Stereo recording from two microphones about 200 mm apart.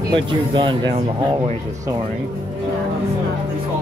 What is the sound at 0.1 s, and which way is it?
Speech, 25° right (ahead or behind).